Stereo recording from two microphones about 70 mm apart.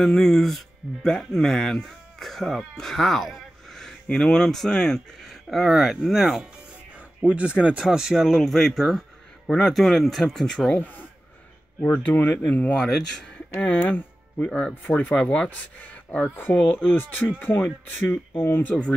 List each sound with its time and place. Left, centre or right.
0.0 s speech: centre
7.2 s speech: centre
10.7 s speech: left
12.7 s speech: centre
13.6 s speech: centre
18.1 s speech: left
18.7 s speech: centre